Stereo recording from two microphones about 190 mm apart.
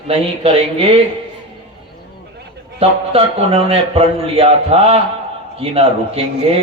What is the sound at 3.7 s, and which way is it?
A man's voice, 30° right (ahead or behind).